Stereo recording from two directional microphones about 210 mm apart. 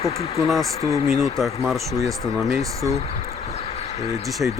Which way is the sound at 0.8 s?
30° left (ahead or behind).